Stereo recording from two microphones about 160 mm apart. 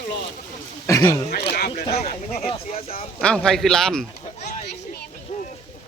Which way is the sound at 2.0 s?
65° left (ahead or behind).